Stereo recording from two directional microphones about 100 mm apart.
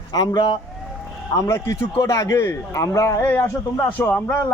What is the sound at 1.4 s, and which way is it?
A man's voice, 30° left (ahead or behind).